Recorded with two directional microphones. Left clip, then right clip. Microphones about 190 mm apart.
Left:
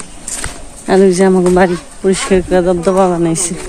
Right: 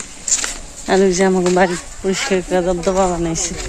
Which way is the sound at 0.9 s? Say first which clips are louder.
Left 5 dB; centre (ahead or behind).